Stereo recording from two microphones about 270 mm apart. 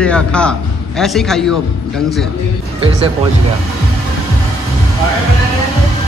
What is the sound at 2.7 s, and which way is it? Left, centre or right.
Speech, right.